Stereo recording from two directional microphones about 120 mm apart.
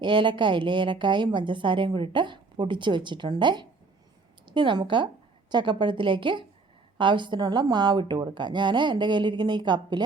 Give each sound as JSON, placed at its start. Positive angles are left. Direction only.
{"t": 0.0, "sound": "a woman's voice", "side_deg": -40}